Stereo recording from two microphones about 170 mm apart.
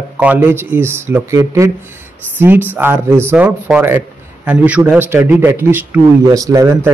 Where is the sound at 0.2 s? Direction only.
10° right (ahead or behind).